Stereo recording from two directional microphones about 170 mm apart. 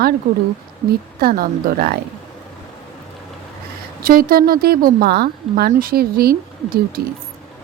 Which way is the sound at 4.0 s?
60° right (ahead or behind).